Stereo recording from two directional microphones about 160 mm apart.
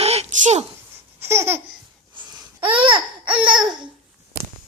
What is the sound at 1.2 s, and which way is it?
Laughter, 15° right (ahead or behind).